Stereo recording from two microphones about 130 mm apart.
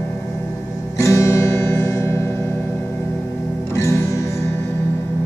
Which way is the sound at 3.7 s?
20° left (ahead or behind).